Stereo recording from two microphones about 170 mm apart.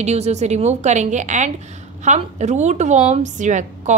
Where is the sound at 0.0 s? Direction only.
40° right (ahead or behind).